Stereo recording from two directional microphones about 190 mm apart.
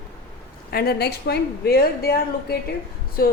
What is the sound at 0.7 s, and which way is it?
Speech, 55° left (ahead or behind).